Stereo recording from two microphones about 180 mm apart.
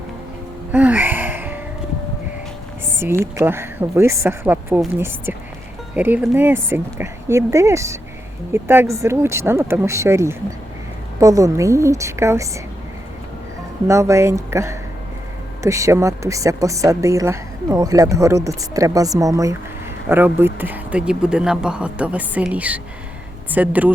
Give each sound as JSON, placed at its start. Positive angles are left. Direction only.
{"t": 0.7, "sound": "a sound", "side_deg": -10}
{"t": 2.8, "sound": "a woman's voice", "side_deg": -15}
{"t": 13.8, "sound": "a woman's voice", "side_deg": -15}